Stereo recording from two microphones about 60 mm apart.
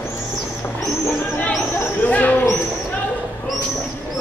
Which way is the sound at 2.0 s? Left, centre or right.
Left.